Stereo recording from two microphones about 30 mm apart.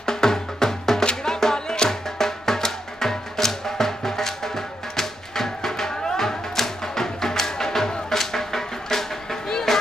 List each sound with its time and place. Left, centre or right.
0.0 s music: centre